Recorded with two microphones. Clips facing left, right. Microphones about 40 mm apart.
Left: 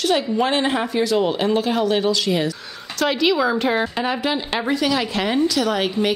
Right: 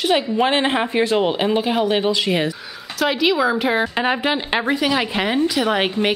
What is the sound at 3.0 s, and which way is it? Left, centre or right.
Speech, centre.